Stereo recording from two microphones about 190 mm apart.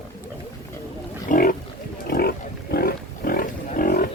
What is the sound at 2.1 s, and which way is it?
Roaring cats, 55° left (ahead or behind).